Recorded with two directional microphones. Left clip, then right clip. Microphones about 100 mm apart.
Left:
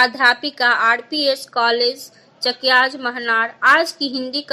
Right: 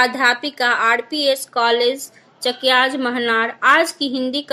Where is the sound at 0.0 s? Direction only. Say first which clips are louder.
Left 1 dB; 20° right (ahead or behind).